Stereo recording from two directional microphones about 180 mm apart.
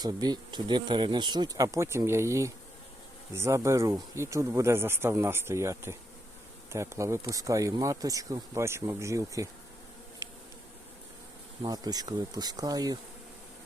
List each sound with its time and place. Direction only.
0.0 s speech: 20° right (ahead or behind)
11.6 s speech: 20° right (ahead or behind)